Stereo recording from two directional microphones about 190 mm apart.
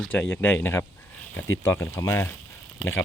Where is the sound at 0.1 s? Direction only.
10° left (ahead or behind).